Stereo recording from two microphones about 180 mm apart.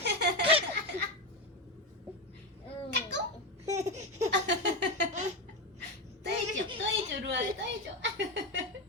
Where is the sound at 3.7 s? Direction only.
40° right (ahead or behind).